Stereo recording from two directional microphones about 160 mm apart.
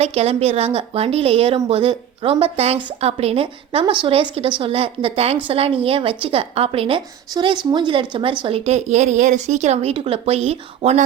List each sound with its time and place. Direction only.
0.0 s a woman's voice: 40° right (ahead or behind)